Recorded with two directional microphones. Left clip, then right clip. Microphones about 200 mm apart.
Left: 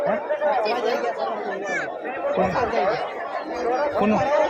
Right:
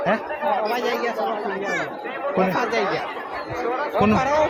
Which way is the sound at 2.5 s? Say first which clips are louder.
Even; 50° right (ahead or behind).